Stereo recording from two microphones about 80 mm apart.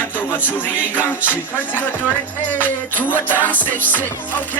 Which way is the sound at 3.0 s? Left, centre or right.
Left.